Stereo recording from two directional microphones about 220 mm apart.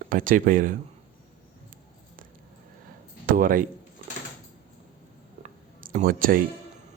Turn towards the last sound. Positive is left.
turn(degrees=-40)  # may be behind; listen again after turning